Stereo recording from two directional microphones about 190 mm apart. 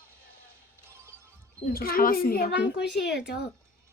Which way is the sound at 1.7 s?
50° left (ahead or behind).